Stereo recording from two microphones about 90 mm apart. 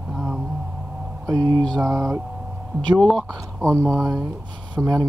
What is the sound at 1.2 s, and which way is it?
Speech, 45° right (ahead or behind).